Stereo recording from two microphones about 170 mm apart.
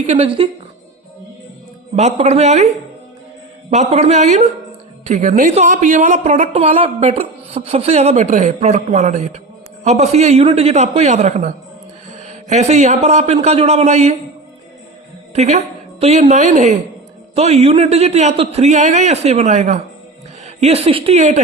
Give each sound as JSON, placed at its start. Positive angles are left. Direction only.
{"t": 0.1, "sound": "speech", "side_deg": -30}
{"t": 2.0, "sound": "speech", "side_deg": -40}
{"t": 3.7, "sound": "a man's voice", "side_deg": -40}
{"t": 6.5, "sound": "speech", "side_deg": -35}
{"t": 15.4, "sound": "a woman's voice", "side_deg": -40}